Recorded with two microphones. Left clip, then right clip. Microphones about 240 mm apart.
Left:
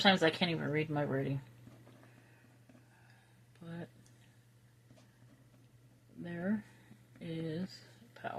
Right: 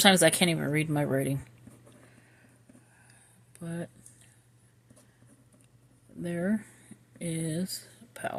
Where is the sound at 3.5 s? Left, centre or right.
Right.